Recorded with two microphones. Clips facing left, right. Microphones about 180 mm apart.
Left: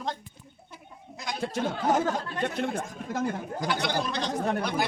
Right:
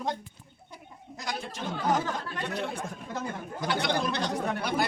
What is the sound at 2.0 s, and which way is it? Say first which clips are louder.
Speech: left 5 dB; 55° left (ahead or behind).